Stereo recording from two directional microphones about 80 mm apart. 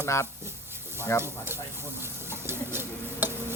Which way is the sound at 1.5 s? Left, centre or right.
Right.